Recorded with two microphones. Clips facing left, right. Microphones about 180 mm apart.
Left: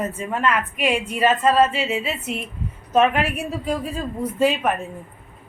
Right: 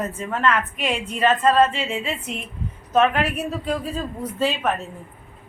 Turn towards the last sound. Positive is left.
turn(degrees=10)  # may be behind; listen again after turning